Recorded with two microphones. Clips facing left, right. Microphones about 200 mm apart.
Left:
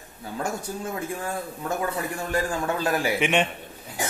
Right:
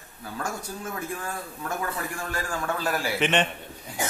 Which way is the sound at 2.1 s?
20° left (ahead or behind).